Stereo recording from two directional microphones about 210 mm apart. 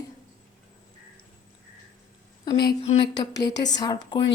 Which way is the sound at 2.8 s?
30° left (ahead or behind).